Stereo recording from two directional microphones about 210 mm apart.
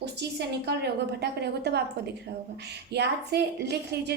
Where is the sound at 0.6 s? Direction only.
50° right (ahead or behind).